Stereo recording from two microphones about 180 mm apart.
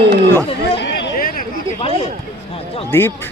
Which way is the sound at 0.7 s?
75° left (ahead or behind).